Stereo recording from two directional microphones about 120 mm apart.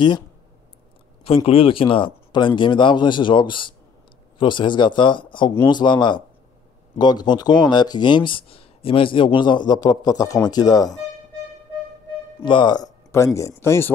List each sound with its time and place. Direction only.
1.2 s a man's voice: 55° left (ahead or behind); by 11.0 s 35° left (ahead or behind)
12.4 s speech: 40° left (ahead or behind)
13.1 s speech: 25° left (ahead or behind)